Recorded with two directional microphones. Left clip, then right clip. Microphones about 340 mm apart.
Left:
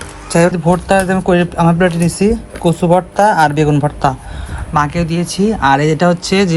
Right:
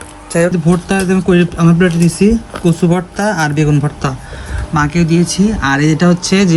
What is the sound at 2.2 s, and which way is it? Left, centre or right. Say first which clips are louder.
Speech: left 1 dB; left.